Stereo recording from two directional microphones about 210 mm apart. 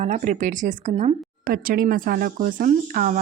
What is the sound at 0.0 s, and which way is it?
A woman's voice, 35° right (ahead or behind).